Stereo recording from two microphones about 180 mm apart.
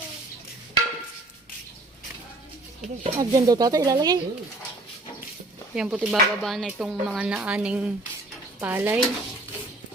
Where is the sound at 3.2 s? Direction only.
20° right (ahead or behind).